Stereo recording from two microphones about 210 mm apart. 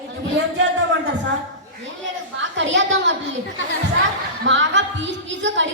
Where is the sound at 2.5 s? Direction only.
60° right (ahead or behind).